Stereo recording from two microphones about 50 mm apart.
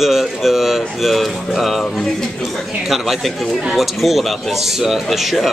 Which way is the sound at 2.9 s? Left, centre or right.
Centre.